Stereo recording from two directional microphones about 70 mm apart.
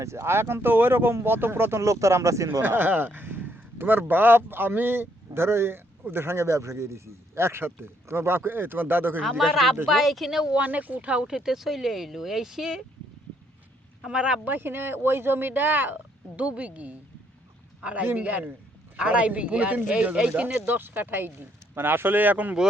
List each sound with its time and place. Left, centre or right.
0.0 s speech: right
1.8 s speech: right
2.6 s speech: right
9.4 s speech: centre
10.5 s speech: right; by 12.8 s centre
14.0 s speech: centre
14.5 s speech: right